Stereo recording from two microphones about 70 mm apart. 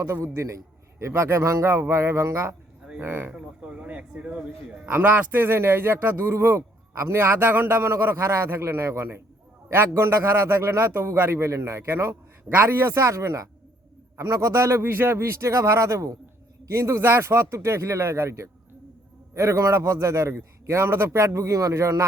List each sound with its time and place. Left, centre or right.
0.0 s a man's voice: right
3.0 s a man's voice: right
3.3 s a man's voice: centre; by 22.0 s right